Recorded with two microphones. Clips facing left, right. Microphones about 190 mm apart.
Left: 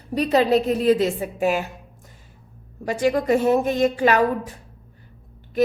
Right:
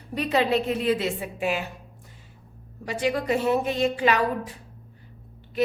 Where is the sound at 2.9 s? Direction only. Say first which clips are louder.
Left 5 dB; 45° left (ahead or behind).